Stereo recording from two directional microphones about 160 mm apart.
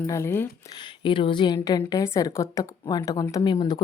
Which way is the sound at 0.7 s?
30° left (ahead or behind).